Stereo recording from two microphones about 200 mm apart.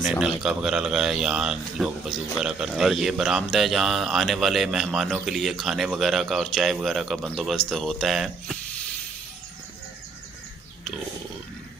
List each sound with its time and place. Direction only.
0.0 s speech: centre (ahead or behind)